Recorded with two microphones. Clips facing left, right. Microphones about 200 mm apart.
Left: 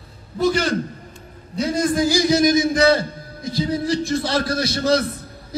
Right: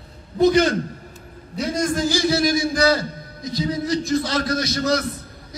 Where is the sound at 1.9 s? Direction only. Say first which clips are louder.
Left 4 dB; 15° left (ahead or behind).